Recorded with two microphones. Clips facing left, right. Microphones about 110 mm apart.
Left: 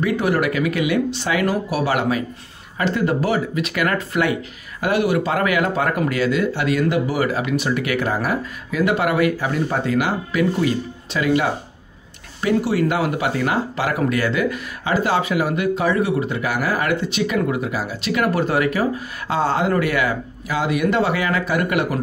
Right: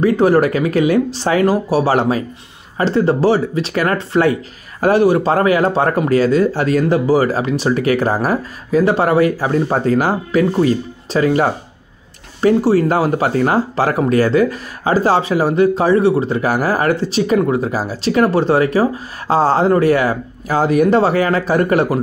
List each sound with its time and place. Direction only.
0.0 s speech: 35° right (ahead or behind)